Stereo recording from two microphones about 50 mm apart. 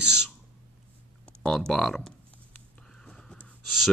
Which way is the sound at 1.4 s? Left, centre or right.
Centre.